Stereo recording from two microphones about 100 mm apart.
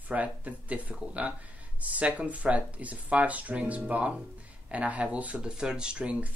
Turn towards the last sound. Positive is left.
turn(degrees=-10)  # may be behind; listen again after turning